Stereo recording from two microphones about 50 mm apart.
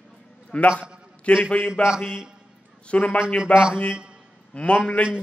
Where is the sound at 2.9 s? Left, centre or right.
Left.